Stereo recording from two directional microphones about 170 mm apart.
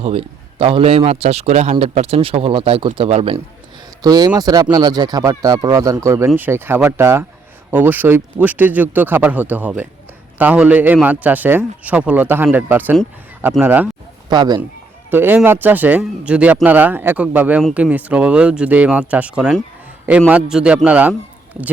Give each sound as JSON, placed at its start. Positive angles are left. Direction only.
{"t": 0.0, "sound": "a man's voice", "side_deg": -35}
{"t": 4.0, "sound": "speech", "side_deg": -20}
{"t": 14.3, "sound": "speech", "side_deg": -25}
{"t": 15.1, "sound": "speech", "side_deg": -10}